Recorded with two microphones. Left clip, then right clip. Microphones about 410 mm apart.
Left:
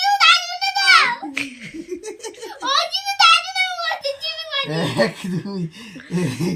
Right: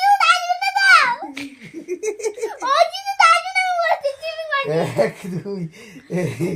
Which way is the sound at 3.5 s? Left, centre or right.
Right.